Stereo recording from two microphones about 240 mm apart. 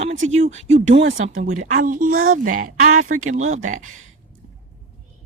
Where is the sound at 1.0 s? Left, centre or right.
Right.